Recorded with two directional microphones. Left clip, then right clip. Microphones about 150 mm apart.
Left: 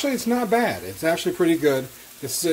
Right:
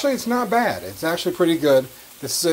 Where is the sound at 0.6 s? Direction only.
15° left (ahead or behind).